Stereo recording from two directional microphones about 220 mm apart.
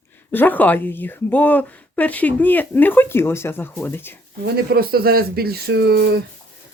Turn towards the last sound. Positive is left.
turn(degrees=-45)  # may be behind; listen again after turning